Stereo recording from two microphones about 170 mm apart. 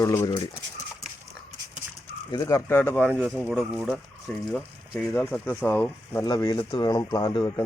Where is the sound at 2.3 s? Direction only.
20° left (ahead or behind); by 5.1 s centre (ahead or behind).